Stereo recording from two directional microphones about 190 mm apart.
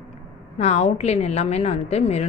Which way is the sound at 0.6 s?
35° left (ahead or behind).